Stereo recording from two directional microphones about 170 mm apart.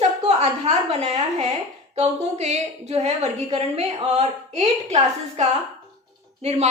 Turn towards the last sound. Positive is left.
turn(degrees=-40)  # may be behind; listen again after turning